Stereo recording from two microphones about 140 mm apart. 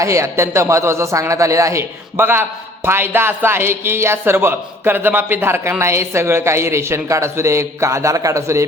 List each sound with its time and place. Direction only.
0.0 s a man's voice: 20° right (ahead or behind)